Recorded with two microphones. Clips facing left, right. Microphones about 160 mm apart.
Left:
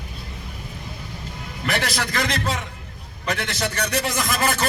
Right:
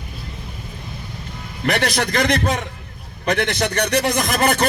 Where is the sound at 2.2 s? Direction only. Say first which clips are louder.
Right 6 dB; 60° right (ahead or behind).